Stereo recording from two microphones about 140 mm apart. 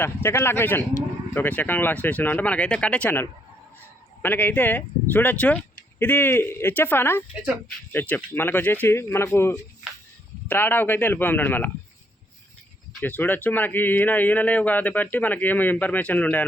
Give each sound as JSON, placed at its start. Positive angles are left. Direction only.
{"t": 0.0, "sound": "speech", "side_deg": 15}
{"t": 13.0, "sound": "speech", "side_deg": 15}